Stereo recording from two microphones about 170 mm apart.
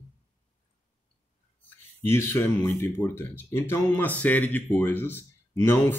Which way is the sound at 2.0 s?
15° left (ahead or behind).